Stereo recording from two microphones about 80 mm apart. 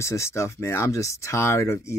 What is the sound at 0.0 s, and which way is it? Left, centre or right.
Speech, left.